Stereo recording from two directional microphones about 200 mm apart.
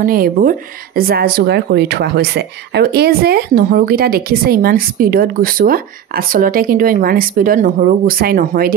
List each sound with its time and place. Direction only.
0.0 s speech: 45° right (ahead or behind)